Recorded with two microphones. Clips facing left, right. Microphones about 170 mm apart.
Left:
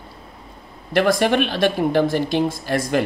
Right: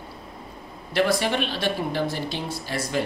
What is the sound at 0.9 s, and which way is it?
Speech, 55° left (ahead or behind).